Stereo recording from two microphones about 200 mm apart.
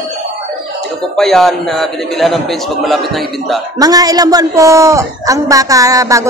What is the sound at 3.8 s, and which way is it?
A woman's voice, 20° right (ahead or behind).